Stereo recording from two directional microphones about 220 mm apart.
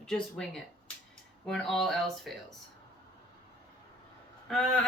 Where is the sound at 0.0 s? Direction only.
5° left (ahead or behind).